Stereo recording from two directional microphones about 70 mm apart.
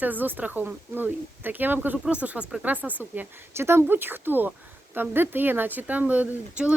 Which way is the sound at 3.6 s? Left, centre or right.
Right.